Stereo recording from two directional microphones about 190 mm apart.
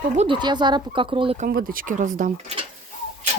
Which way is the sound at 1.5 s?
50° right (ahead or behind).